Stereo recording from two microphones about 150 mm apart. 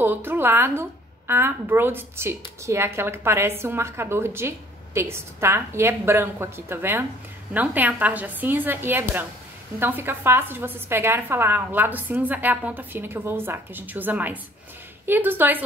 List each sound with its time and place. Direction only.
0.0 s a woman's voice: 15° right (ahead or behind)